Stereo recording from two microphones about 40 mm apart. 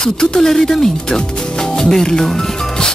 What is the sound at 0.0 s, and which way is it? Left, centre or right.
Speech, centre.